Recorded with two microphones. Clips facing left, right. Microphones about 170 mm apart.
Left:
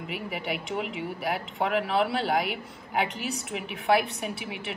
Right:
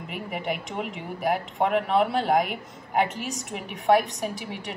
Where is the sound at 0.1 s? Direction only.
Centre (ahead or behind).